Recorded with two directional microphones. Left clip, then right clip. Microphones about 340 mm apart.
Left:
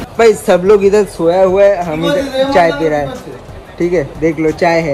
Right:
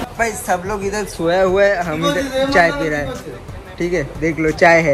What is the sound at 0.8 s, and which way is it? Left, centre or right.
A man's voice, centre.